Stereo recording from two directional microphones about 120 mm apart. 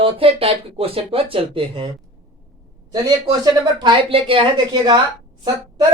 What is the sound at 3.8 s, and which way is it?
Speech, 50° right (ahead or behind).